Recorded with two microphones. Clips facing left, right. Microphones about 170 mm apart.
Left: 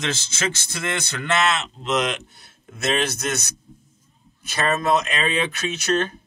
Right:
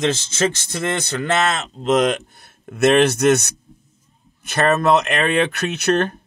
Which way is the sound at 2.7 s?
65° right (ahead or behind).